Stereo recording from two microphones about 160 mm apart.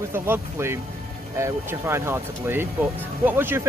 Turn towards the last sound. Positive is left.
turn(degrees=-15)  # may be behind; listen again after turning